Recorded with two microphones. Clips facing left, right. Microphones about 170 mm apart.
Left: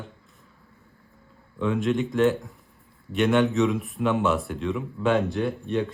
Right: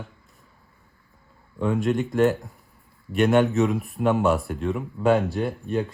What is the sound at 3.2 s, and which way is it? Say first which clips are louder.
Speech: right 2 dB; 40° right (ahead or behind).